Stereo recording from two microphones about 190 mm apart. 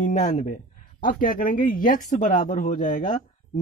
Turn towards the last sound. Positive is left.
turn(degrees=45)  # may be behind; listen again after turning